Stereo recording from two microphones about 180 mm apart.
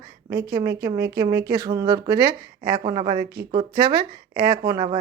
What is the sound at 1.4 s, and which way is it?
Speech, 60° right (ahead or behind).